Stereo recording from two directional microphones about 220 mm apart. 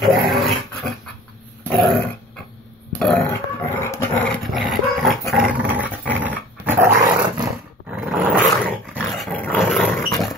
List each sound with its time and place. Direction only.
0.0 s dog: centre (ahead or behind)
2.9 s dog: 5° left (ahead or behind)
4.2 s dog: centre (ahead or behind)